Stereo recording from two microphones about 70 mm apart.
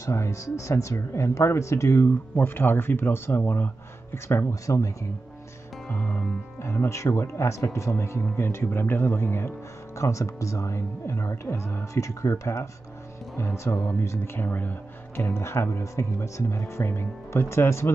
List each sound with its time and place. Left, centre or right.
0.0 s speech: left
4.6 s speech: left
5.9 s music: left
6.6 s speech: left